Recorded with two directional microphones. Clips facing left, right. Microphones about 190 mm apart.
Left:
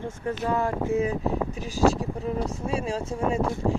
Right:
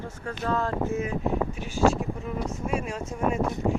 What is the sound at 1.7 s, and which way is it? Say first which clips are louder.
Speech: left 1 dB; 35° left (ahead or behind).